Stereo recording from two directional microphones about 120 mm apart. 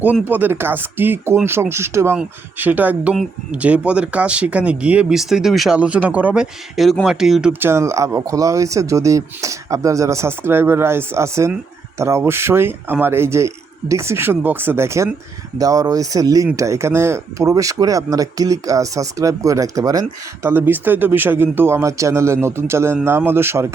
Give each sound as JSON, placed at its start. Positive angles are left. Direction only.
{"t": 0.0, "sound": "speech", "side_deg": -15}
{"t": 7.6, "sound": "speech", "side_deg": -20}
{"t": 20.5, "sound": "speech", "side_deg": -15}